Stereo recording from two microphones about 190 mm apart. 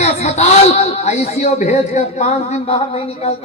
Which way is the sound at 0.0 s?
35° left (ahead or behind).